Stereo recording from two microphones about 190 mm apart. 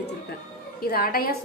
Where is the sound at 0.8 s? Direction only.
55° left (ahead or behind).